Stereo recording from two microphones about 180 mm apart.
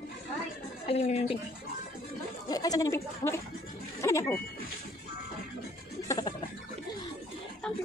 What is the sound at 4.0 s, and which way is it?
Music, 15° left (ahead or behind).